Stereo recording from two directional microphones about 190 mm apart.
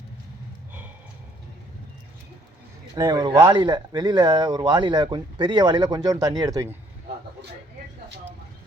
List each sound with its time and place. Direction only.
2.9 s speech: 20° right (ahead or behind)